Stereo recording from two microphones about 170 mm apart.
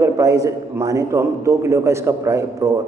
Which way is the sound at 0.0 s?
20° right (ahead or behind).